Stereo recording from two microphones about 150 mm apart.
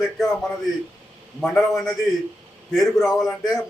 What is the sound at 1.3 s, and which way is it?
A man's voice, centre (ahead or behind).